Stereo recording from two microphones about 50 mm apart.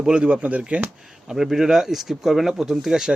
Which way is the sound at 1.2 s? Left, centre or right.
Centre.